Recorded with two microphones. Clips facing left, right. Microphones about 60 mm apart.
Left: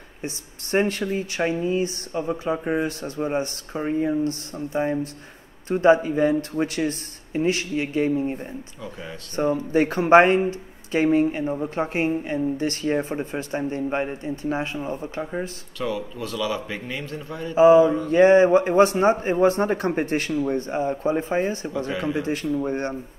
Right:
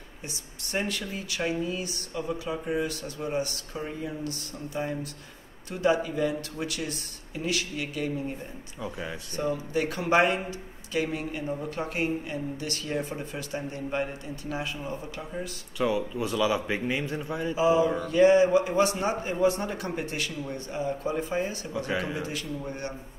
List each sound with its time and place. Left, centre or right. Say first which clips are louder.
0.2 s speech: left 8 dB; left
15.8 s a man's voice: right 1 dB; centre
17.6 s speech: left 10 dB; left